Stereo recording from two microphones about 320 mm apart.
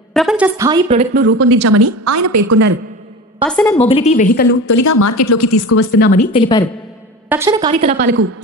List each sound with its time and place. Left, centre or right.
0.1 s a woman's voice: centre
1.2 s a woman's voice: right
3.4 s a woman's voice: centre
3.7 s speech: centre
4.6 s a woman's voice: left
5.9 s a woman's voice: left
7.2 s a woman's voice: centre
7.8 s a woman's voice: right